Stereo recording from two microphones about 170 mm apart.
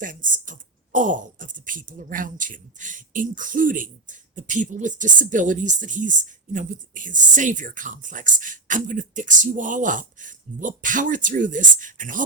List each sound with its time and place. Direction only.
0.0 s speech: 50° right (ahead or behind)